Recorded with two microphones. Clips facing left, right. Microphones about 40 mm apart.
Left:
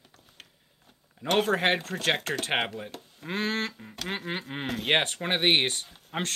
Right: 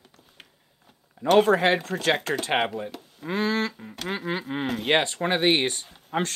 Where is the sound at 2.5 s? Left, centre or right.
Centre.